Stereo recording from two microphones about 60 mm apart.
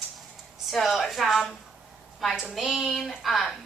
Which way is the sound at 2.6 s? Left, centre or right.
Centre.